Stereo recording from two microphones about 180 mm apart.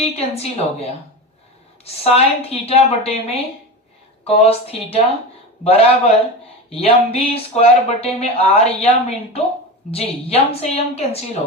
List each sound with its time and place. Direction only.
0.0 s speech: 35° left (ahead or behind)